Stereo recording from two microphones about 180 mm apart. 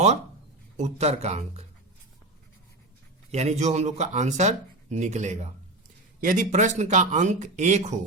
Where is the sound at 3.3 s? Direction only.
40° right (ahead or behind).